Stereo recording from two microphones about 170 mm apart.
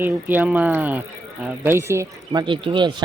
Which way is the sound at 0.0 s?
10° right (ahead or behind).